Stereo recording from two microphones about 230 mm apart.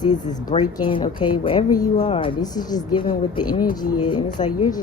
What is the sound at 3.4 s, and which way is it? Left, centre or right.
Speech, left.